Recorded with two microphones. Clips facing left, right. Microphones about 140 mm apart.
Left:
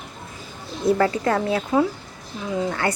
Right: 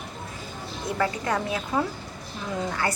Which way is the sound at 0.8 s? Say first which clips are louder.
Left 13 dB; 25° left (ahead or behind).